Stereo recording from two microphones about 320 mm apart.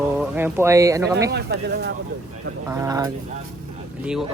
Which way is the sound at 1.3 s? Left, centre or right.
Right.